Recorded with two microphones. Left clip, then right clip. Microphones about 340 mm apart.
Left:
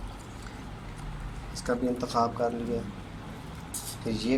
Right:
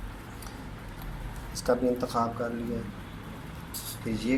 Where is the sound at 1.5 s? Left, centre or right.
Centre.